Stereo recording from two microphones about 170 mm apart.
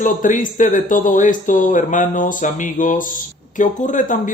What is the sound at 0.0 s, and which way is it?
Speech, 50° left (ahead or behind).